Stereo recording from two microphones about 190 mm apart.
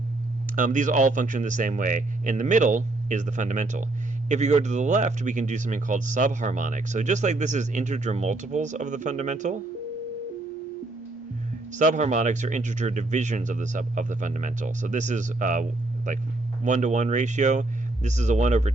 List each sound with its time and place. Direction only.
0.5 s speech: 45° right (ahead or behind)
11.7 s speech: 40° right (ahead or behind)